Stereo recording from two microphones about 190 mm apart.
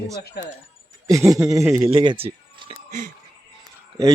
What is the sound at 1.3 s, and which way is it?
Speech, 15° right (ahead or behind).